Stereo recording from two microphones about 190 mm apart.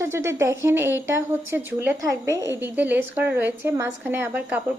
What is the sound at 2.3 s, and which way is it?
Speech, 15° left (ahead or behind).